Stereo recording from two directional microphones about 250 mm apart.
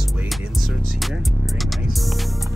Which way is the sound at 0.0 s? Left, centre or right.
Centre.